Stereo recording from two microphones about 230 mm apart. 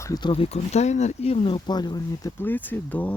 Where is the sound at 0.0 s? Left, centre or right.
Centre.